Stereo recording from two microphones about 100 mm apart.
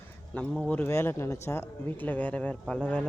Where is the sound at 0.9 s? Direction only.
25° left (ahead or behind).